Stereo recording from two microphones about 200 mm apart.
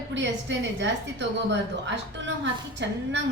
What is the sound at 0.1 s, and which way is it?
Speech, 65° right (ahead or behind).